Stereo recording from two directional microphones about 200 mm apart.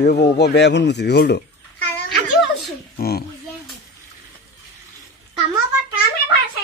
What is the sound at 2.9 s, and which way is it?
Speech, 50° left (ahead or behind).